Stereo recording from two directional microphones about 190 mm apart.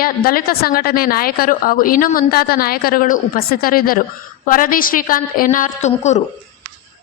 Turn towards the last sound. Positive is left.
turn(degrees=35)  # may be behind; listen again after turning